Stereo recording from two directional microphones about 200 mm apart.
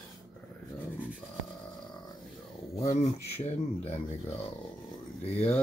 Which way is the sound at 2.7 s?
35° left (ahead or behind).